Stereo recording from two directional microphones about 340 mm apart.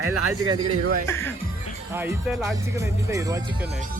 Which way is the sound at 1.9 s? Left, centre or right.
Centre.